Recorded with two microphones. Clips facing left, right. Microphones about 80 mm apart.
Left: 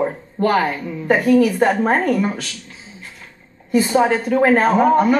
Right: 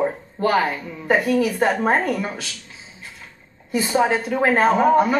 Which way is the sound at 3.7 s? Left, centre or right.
Left.